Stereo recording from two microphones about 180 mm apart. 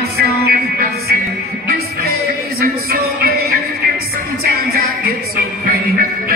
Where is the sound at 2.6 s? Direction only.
60° right (ahead or behind).